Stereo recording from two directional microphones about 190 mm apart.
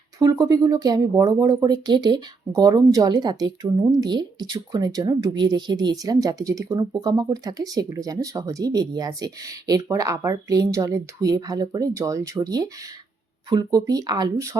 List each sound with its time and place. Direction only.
0.2 s speech: 20° right (ahead or behind)